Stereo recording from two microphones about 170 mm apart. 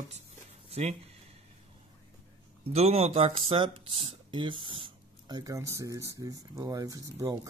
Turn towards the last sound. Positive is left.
turn(degrees=-20)  # may be behind; listen again after turning